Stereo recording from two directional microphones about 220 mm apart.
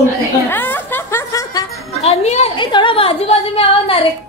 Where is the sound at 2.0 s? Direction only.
30° left (ahead or behind).